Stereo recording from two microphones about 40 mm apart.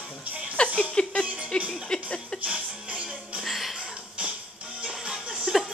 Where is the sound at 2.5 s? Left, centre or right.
Right.